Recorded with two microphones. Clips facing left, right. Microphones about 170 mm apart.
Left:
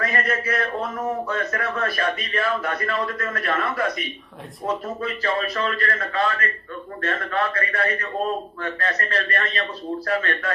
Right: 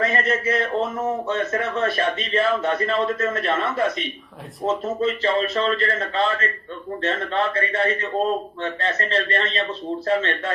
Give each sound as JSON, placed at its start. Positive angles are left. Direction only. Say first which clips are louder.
{"t": 0.0, "sound": "speech", "louder": "right 3 dB", "side_deg": -25}